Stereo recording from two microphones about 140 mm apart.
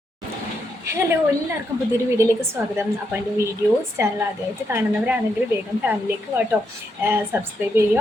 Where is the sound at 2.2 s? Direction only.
20° right (ahead or behind).